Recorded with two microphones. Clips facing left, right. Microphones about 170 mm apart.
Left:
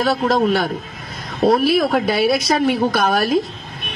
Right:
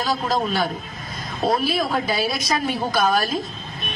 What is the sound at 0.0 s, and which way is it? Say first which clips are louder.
A man's voice: left 6 dB; 65° left (ahead or behind).